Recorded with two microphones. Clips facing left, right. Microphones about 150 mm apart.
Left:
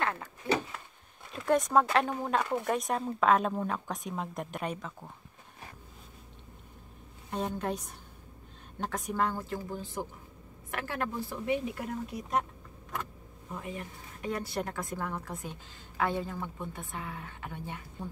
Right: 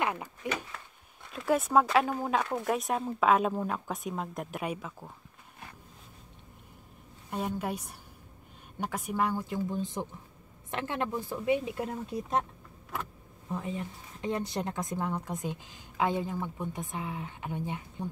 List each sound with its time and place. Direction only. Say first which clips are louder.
0.0 s a sound: right 2 dB; 15° right (ahead or behind)
1.3 s speech: even; 5° right (ahead or behind)
7.2 s a woman's voice: even; 5° right (ahead or behind); by 12.4 s 25° right (ahead or behind)
13.6 s speech: right 2 dB; 25° right (ahead or behind)